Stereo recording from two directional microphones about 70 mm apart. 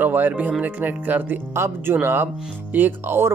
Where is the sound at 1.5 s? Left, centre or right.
Right.